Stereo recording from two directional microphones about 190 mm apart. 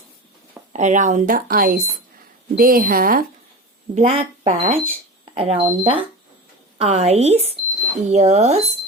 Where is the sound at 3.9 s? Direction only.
35° right (ahead or behind).